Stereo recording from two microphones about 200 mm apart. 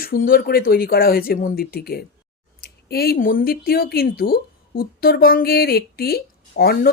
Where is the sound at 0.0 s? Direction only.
45° left (ahead or behind).